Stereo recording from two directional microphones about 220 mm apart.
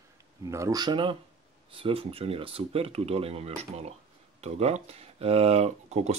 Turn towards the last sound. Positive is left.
turn(degrees=-30)  # may be behind; listen again after turning